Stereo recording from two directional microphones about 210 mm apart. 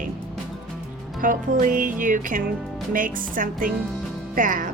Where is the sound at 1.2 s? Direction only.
40° right (ahead or behind).